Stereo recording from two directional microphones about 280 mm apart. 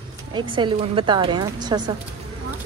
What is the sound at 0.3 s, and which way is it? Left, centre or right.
Speech, centre.